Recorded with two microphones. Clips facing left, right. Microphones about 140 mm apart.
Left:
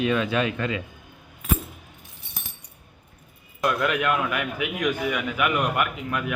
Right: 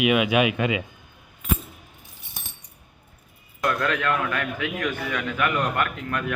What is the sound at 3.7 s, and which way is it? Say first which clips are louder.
A man's voice: left 2 dB; 10° left (ahead or behind).